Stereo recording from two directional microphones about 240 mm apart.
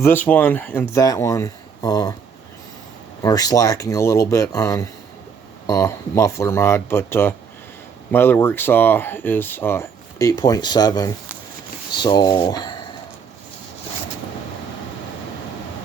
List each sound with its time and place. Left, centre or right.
0.0 s speech: centre
3.2 s speech: centre